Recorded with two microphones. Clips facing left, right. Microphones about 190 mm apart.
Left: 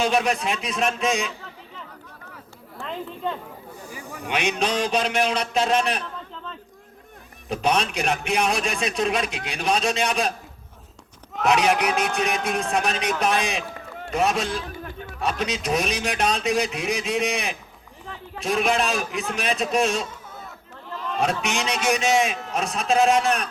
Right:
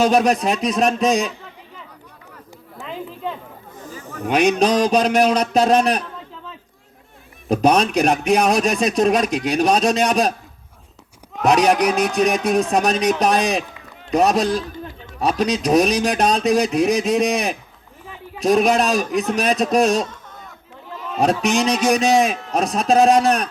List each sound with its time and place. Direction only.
0.0 s a man's voice: 40° right (ahead or behind)
2.7 s chatter: 5° right (ahead or behind)
3.8 s bee: 10° left (ahead or behind)
4.3 s a man's voice: 40° right (ahead or behind)
7.4 s a man's voice: 40° right (ahead or behind)
11.4 s a man's voice: 40° right (ahead or behind)
20.9 s a sound: 5° right (ahead or behind)
21.8 s a man's voice: 40° right (ahead or behind)